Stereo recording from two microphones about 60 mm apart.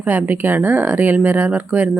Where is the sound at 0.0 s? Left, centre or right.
Right.